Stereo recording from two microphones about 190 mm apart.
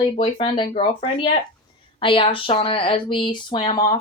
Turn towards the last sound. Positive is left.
turn(degrees=20)  # may be behind; listen again after turning